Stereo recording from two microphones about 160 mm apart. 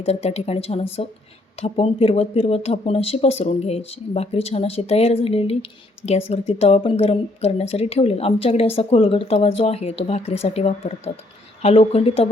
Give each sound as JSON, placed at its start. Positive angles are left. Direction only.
{"t": 0.0, "sound": "a woman's voice", "side_deg": 40}